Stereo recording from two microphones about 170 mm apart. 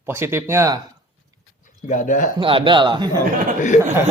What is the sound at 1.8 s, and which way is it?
Speech, 45° left (ahead or behind).